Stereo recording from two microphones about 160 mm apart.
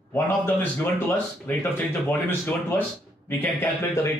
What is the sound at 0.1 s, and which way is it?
Speech, 15° left (ahead or behind).